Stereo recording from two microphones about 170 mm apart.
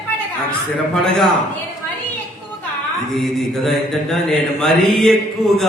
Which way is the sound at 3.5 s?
Centre (ahead or behind).